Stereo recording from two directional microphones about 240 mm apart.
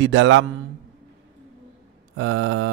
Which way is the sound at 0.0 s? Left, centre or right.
Right.